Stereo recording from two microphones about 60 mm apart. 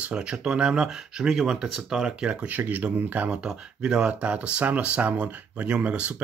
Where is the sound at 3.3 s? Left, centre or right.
Centre.